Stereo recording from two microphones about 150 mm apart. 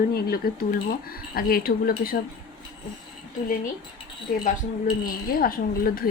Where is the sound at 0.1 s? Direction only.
90° left; by 2.1 s 75° left (ahead or behind).